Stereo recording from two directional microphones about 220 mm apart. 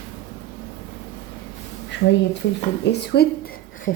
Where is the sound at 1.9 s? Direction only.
55° left (ahead or behind).